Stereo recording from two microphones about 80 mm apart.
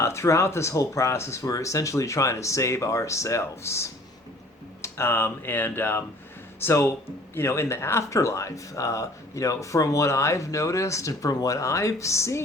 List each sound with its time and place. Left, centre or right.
0.0 s speech: left